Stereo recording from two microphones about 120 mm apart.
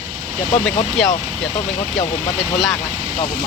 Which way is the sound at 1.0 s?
5° left (ahead or behind).